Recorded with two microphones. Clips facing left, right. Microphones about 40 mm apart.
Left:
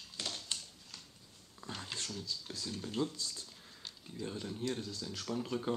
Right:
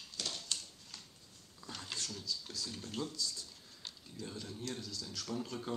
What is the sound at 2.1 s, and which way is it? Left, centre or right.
Speech, centre.